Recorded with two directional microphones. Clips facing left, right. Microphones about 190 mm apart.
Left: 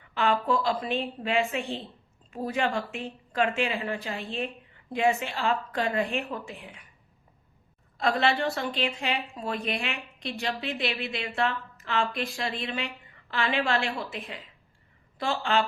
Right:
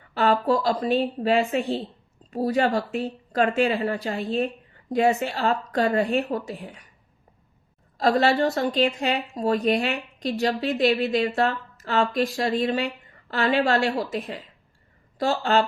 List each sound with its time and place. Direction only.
0.1 s a woman's voice: 40° right (ahead or behind)
7.9 s a woman's voice: 40° right (ahead or behind)